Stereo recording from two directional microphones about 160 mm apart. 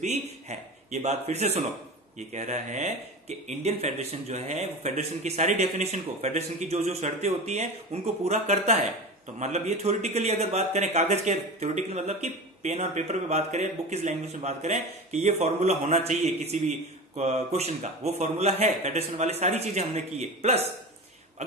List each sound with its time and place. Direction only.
0.0 s a man's voice: 45° right (ahead or behind)